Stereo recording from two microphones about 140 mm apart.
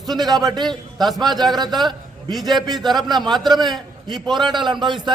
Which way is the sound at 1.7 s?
Centre (ahead or behind).